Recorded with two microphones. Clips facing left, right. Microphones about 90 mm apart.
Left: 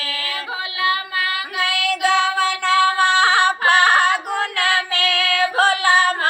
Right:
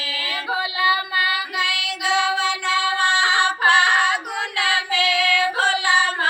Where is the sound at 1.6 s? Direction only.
50° left (ahead or behind).